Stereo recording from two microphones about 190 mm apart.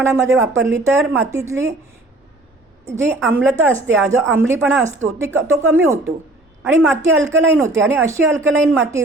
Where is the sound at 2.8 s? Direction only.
15° right (ahead or behind).